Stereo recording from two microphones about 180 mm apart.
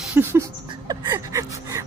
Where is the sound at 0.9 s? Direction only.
20° right (ahead or behind).